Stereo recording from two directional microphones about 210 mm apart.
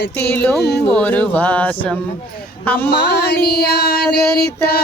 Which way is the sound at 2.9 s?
50° left (ahead or behind).